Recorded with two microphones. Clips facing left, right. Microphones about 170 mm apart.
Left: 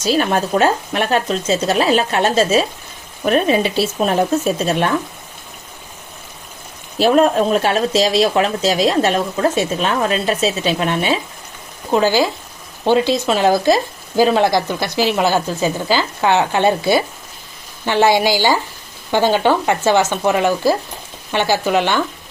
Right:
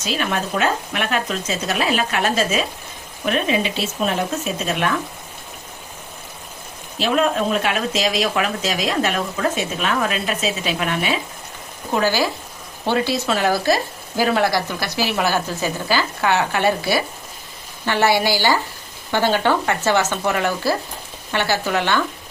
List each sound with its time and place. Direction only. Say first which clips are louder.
0.0 s speech: left 7 dB; 40° left (ahead or behind)
7.0 s speech: left 6 dB; 40° left (ahead or behind); by 22.0 s 15° left (ahead or behind)